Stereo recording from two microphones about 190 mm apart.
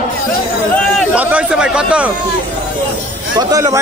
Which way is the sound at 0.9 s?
5° right (ahead or behind).